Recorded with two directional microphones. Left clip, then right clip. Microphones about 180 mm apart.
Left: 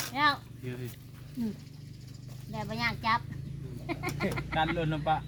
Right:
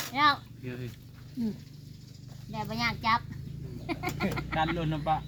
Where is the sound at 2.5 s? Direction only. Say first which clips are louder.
Right 1 dB; 15° right (ahead or behind).